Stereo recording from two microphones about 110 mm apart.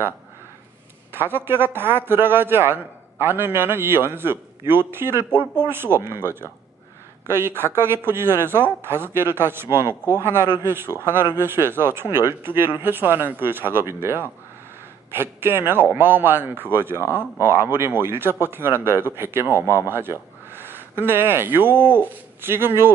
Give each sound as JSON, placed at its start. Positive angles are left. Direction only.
{"t": 1.1, "sound": "a man's voice", "side_deg": -20}
{"t": 5.3, "sound": "speech", "side_deg": 45}
{"t": 5.7, "sound": "a man's voice", "side_deg": -20}